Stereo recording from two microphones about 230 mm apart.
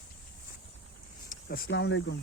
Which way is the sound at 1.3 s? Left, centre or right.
Left.